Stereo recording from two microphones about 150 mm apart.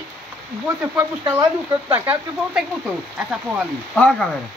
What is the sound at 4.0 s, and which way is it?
Speech, 5° left (ahead or behind).